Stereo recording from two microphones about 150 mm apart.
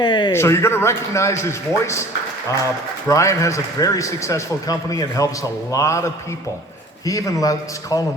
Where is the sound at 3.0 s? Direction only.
20° left (ahead or behind).